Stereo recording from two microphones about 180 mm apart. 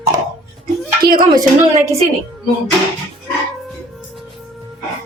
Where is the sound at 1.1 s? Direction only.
25° right (ahead or behind).